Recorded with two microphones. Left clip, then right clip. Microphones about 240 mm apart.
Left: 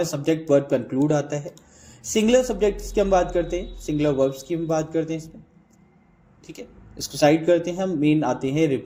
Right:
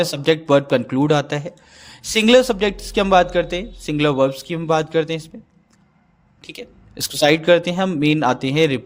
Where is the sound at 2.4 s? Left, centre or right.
Right.